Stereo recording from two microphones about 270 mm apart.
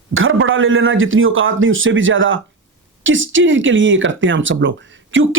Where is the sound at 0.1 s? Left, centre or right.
Right.